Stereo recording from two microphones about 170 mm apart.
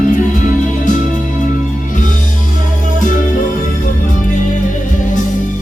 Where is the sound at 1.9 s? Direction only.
50° left (ahead or behind).